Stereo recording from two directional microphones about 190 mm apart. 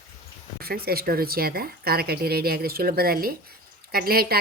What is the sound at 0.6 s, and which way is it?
A woman's voice, 55° right (ahead or behind).